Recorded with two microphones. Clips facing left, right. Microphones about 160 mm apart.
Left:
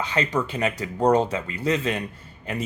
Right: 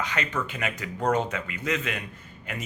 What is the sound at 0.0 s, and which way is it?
Speech, 30° left (ahead or behind).